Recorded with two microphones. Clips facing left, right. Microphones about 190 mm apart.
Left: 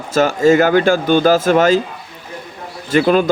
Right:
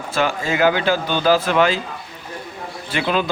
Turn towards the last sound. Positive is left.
turn(degrees=45)  # may be behind; listen again after turning